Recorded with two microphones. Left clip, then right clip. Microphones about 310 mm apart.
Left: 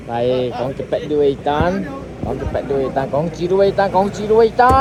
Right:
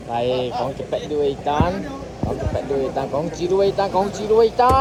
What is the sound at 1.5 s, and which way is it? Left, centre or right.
Speech, left.